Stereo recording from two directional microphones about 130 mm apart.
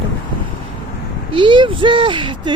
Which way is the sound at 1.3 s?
40° right (ahead or behind).